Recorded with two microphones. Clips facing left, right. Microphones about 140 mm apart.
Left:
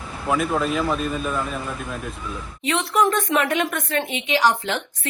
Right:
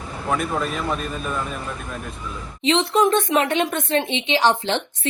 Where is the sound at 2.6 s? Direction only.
20° right (ahead or behind).